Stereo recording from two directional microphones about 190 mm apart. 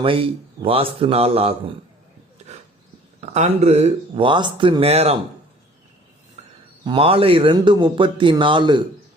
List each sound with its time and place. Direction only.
0.0 s a man's voice: 30° right (ahead or behind)
3.2 s speech: 35° right (ahead or behind)
6.8 s a man's voice: 30° right (ahead or behind)